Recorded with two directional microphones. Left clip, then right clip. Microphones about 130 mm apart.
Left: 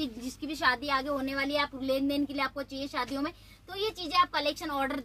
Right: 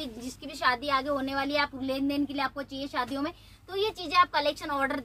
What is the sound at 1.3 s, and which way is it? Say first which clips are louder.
A woman's voice: right 2 dB; 30° left (ahead or behind).